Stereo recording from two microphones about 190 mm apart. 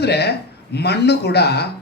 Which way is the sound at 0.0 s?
60° left (ahead or behind).